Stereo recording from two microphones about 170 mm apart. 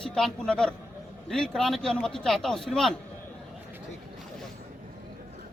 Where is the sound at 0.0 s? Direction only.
5° left (ahead or behind).